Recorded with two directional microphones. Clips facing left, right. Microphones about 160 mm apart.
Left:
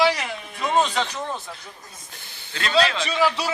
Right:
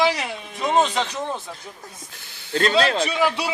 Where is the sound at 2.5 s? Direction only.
40° right (ahead or behind).